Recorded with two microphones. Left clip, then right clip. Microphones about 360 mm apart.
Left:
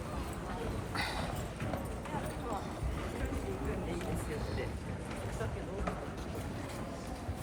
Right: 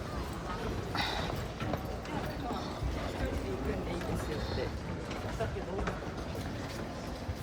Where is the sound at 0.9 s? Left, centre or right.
Centre.